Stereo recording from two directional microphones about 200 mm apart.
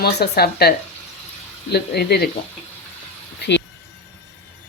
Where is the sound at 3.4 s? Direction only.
60° left (ahead or behind).